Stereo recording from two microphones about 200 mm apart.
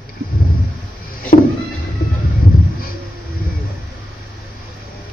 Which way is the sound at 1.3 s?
45° left (ahead or behind).